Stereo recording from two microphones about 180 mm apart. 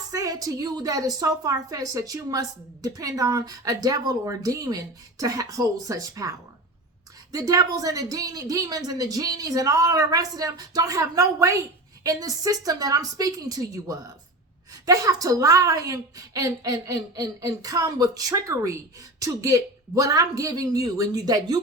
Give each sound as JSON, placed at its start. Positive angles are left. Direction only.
{"t": 0.1, "sound": "a woman's voice", "side_deg": -20}